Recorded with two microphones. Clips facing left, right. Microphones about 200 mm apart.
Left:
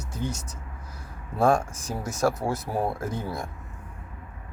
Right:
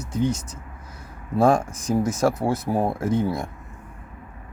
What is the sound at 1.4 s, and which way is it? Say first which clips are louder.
Speech: right 3 dB; 20° right (ahead or behind).